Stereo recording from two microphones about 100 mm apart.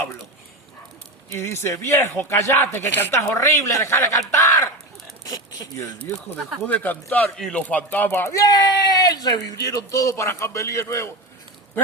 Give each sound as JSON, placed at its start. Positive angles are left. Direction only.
{"t": 1.3, "sound": "speech", "side_deg": 25}
{"t": 5.2, "sound": "a sound", "side_deg": 35}
{"t": 6.7, "sound": "speech", "side_deg": 15}
{"t": 7.3, "sound": "speech", "side_deg": 5}
{"t": 7.7, "sound": "speech", "side_deg": 15}
{"t": 8.4, "sound": "speech", "side_deg": 40}